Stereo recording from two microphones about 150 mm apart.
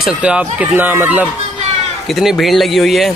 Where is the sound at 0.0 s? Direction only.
5° right (ahead or behind).